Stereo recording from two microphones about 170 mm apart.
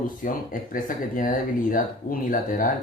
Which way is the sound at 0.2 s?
55° left (ahead or behind).